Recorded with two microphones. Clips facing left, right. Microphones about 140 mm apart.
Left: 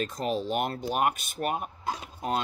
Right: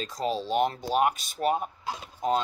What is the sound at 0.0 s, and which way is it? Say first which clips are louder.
Speech: even; 55° left (ahead or behind).